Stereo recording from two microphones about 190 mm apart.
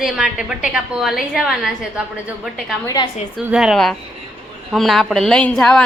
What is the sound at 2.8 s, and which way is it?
Speech, 20° left (ahead or behind).